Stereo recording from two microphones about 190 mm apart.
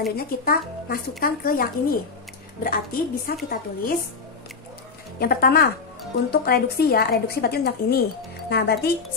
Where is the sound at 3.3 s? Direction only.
50° left (ahead or behind).